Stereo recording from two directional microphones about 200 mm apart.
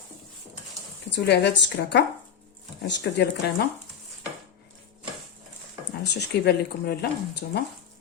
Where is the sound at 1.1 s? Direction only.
60° left (ahead or behind).